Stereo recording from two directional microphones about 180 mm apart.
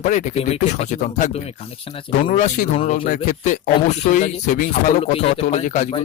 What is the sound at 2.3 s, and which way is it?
Speech, 40° left (ahead or behind).